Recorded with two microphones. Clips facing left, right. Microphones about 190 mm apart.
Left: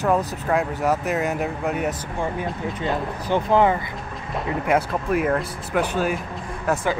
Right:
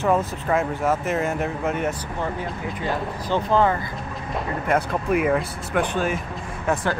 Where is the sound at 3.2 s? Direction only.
15° left (ahead or behind).